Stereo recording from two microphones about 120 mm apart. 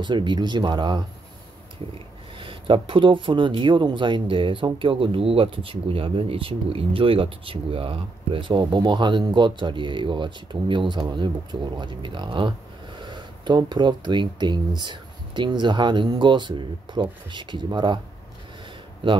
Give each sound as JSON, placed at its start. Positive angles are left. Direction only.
{"t": 0.0, "sound": "speech", "side_deg": -40}
{"t": 2.3, "sound": "speech", "side_deg": -45}